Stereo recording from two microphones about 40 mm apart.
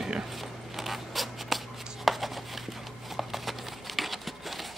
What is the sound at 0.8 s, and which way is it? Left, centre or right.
Zipper, centre.